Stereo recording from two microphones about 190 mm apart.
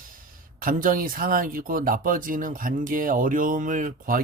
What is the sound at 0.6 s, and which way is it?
Speech, 45° right (ahead or behind).